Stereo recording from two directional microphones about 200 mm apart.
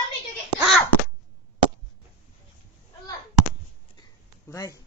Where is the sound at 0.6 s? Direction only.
5° right (ahead or behind).